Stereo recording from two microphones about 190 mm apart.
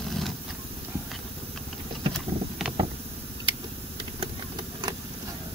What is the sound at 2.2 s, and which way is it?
Boat, centre (ahead or behind).